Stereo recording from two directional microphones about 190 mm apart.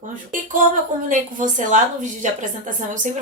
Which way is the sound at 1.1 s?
40° right (ahead or behind).